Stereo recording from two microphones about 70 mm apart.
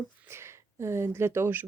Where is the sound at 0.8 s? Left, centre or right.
Right.